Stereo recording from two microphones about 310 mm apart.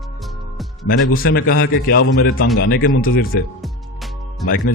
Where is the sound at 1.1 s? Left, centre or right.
Left.